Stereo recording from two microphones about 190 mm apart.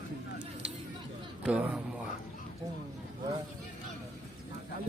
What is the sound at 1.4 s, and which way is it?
Speech, 5° right (ahead or behind).